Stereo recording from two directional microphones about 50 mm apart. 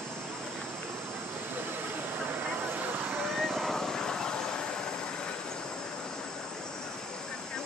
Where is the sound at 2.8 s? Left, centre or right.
Right.